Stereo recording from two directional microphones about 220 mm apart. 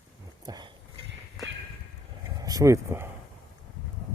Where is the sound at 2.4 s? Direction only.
15° right (ahead or behind).